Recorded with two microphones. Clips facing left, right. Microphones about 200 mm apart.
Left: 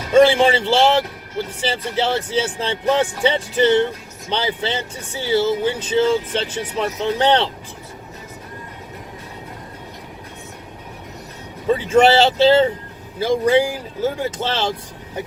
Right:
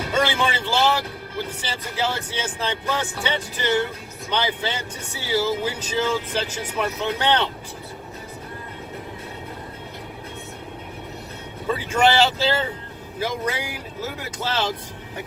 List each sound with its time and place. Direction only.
0.1 s speech: 30° left (ahead or behind)
11.7 s speech: 25° left (ahead or behind)